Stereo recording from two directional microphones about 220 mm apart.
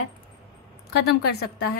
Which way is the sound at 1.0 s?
50° left (ahead or behind).